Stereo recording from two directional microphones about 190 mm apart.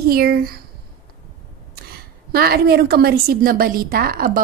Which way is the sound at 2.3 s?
55° right (ahead or behind).